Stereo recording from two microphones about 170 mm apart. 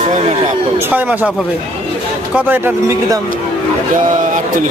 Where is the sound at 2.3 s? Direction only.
10° right (ahead or behind).